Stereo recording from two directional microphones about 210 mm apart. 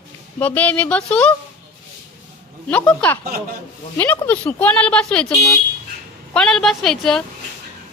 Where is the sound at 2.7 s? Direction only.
5° left (ahead or behind).